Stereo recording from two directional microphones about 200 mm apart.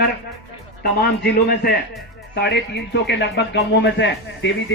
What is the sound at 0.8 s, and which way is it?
A man's voice, 50° left (ahead or behind).